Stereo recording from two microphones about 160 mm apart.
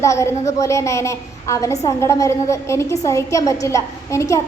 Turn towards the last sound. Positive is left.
turn(degrees=20)  # may be behind; listen again after turning